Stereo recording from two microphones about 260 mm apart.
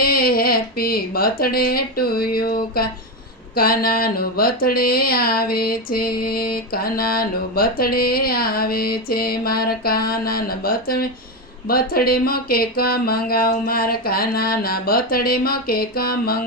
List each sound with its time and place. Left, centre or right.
0.0 s speech: left